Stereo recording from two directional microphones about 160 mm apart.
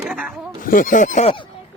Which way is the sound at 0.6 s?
55° left (ahead or behind).